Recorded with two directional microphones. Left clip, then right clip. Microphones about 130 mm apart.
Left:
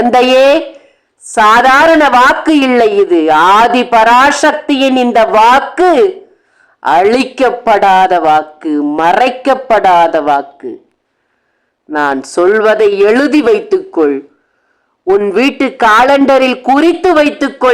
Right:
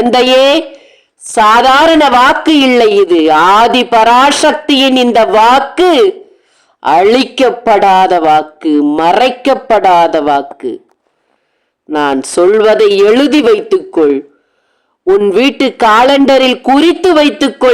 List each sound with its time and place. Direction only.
0.0 s a man's voice: 20° right (ahead or behind)
2.6 s a man's voice: 30° right (ahead or behind)
6.7 s a sound: 20° right (ahead or behind)
7.0 s speech: 20° right (ahead or behind)
9.1 s a man's voice: 25° right (ahead or behind)
11.9 s a man's voice: 25° right (ahead or behind)
15.2 s a man's voice: 30° right (ahead or behind)
15.8 s a man's voice: 20° right (ahead or behind)